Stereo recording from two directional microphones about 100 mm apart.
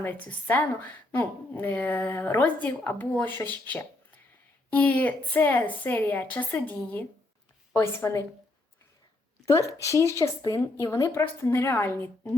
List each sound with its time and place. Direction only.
0.0 s a woman's voice: 20° left (ahead or behind)
7.8 s a woman's voice: 30° left (ahead or behind)
9.5 s a woman's voice: 30° left (ahead or behind)